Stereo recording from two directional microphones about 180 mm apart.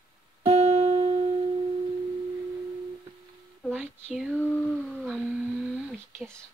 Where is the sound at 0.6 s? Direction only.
40° right (ahead or behind).